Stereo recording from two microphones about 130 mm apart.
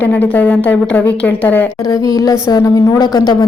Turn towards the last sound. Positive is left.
turn(degrees=30)  # may be behind; listen again after turning